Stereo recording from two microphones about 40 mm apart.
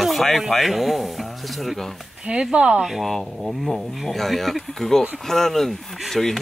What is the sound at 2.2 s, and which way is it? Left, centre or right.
Speech, right.